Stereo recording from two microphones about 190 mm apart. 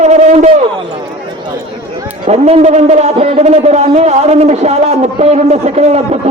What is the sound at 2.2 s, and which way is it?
Speech, 35° right (ahead or behind).